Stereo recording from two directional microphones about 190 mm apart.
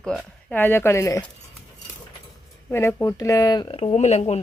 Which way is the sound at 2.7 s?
10° left (ahead or behind).